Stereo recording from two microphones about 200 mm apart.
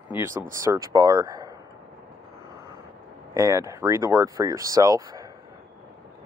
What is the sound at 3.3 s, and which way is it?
Speech, 15° right (ahead or behind).